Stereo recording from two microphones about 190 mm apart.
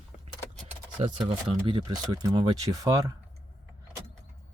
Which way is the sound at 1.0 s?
40° right (ahead or behind).